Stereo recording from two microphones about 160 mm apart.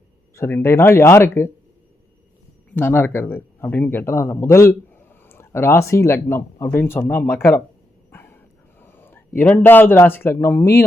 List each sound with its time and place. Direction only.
0.3 s a man's voice: 15° left (ahead or behind)
2.6 s a man's voice: 10° left (ahead or behind)
8.1 s dog: 15° left (ahead or behind)
8.8 s a sound: 15° left (ahead or behind)
9.4 s a man's voice: 10° left (ahead or behind)